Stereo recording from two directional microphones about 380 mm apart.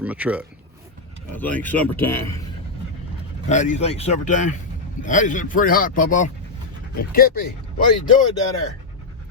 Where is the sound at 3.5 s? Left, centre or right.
Centre.